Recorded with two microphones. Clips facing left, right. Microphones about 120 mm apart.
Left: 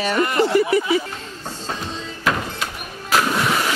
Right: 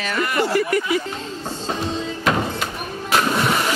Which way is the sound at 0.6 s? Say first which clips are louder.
Left 2 dB; 5° left (ahead or behind).